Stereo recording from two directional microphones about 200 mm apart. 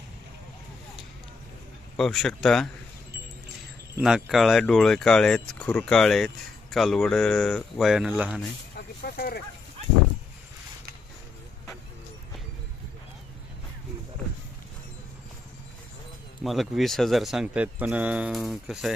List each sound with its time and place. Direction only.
2.0 s speech: centre (ahead or behind)
3.9 s speech: 5° right (ahead or behind)
9.0 s a sound: 55° left (ahead or behind)
16.4 s speech: centre (ahead or behind)